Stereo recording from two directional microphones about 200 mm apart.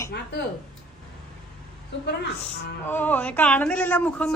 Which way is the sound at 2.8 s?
10° left (ahead or behind).